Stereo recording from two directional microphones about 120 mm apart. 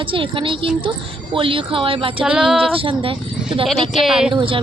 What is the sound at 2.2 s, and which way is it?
Music, 10° right (ahead or behind).